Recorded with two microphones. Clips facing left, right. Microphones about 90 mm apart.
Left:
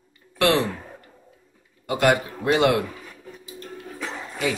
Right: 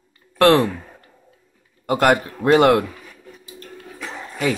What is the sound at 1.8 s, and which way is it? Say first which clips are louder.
A man's voice: right 3 dB; 50° right (ahead or behind).